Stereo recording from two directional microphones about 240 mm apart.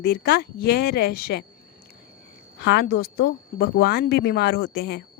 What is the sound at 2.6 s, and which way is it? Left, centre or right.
A woman's voice, left.